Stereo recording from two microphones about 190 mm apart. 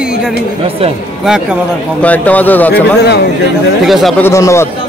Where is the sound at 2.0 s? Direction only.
10° left (ahead or behind).